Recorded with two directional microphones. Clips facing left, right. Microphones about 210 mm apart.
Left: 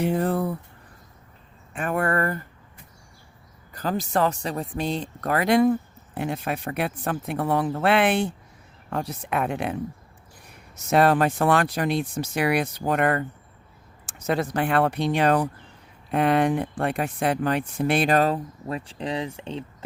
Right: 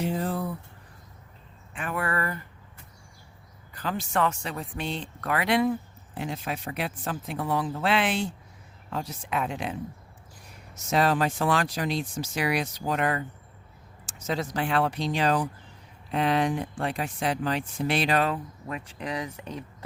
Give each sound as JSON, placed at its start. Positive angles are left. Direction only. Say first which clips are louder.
{"t": 0.0, "sound": "speech", "louder": "left 5 dB", "side_deg": 60}
{"t": 1.7, "sound": "speech", "louder": "left 6 dB", "side_deg": 45}
{"t": 3.8, "sound": "speech", "louder": "left 4 dB", "side_deg": 40}
{"t": 6.1, "sound": "speech", "louder": "left 5 dB", "side_deg": 60}
{"t": 10.8, "sound": "speech", "louder": "left 5 dB", "side_deg": 60}